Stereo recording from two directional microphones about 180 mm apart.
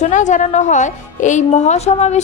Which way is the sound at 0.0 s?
45° left (ahead or behind).